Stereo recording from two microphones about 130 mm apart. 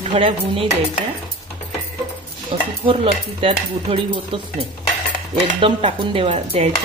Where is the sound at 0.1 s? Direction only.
45° right (ahead or behind).